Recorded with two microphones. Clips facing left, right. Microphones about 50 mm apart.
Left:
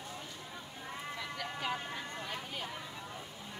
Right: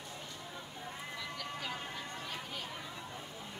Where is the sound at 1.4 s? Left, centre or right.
Centre.